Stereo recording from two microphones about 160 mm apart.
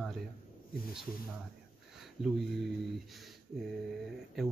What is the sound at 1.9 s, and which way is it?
Speech, centre (ahead or behind).